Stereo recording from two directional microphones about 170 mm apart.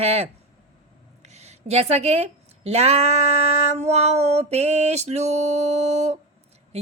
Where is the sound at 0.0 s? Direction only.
35° right (ahead or behind).